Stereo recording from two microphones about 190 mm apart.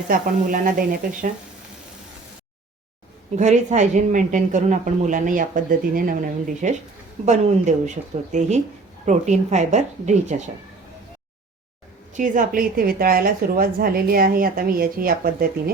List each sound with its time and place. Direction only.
0.1 s a woman's voice: 45° right (ahead or behind)
3.3 s speech: 40° right (ahead or behind)
12.1 s a woman's voice: 45° right (ahead or behind)